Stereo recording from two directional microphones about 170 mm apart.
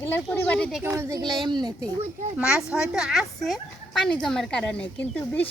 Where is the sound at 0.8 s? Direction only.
10° right (ahead or behind).